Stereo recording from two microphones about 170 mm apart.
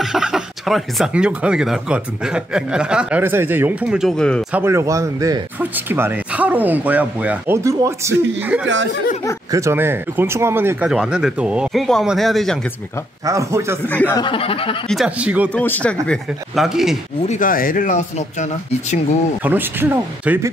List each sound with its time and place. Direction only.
0.0 s speech: 5° right (ahead or behind)
4.5 s speech: 10° right (ahead or behind)
13.2 s speech: 20° right (ahead or behind)
13.8 s speech: 10° left (ahead or behind)
14.1 s snicker: 30° left (ahead or behind)
14.9 s speech: 5° right (ahead or behind)
15.5 s speech: 10° left (ahead or behind)
17.3 s speech: 55° left (ahead or behind)
19.4 s speech: 10° right (ahead or behind)